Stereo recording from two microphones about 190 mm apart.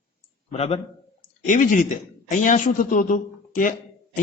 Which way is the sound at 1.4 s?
45° left (ahead or behind).